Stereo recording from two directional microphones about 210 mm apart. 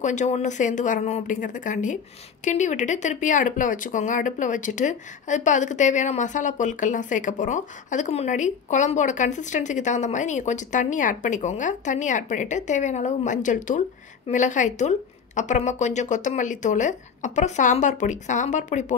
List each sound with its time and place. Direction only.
0.0 s speech: 35° left (ahead or behind)